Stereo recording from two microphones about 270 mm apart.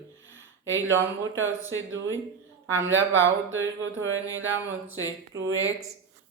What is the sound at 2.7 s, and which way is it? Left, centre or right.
Speech, right.